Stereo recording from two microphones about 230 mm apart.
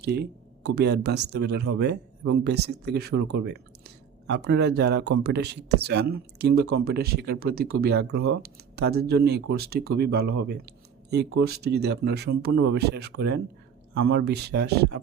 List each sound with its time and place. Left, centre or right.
0.0 s speech: right